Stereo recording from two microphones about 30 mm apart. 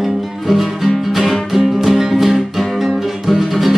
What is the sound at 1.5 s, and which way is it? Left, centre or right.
Music, centre.